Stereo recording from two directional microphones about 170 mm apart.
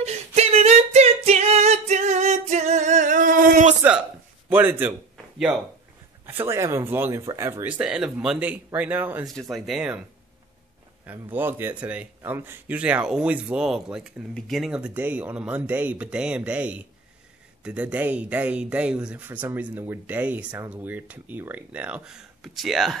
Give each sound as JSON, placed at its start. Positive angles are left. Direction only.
{"t": 0.4, "sound": "singing", "side_deg": -35}
{"t": 4.5, "sound": "speech", "side_deg": -10}
{"t": 5.1, "sound": "a sound", "side_deg": -5}
{"t": 6.2, "sound": "speech", "side_deg": -15}
{"t": 7.7, "sound": "speech", "side_deg": -5}
{"t": 9.3, "sound": "speech", "side_deg": 0}
{"t": 11.3, "sound": "speech", "side_deg": -10}